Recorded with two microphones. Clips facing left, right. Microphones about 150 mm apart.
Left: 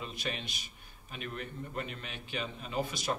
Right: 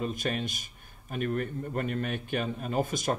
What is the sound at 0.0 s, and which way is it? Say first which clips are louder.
A man's voice: right 8 dB; 45° right (ahead or behind).